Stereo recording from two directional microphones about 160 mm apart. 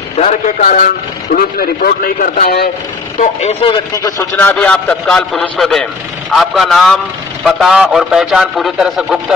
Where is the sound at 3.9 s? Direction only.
20° left (ahead or behind).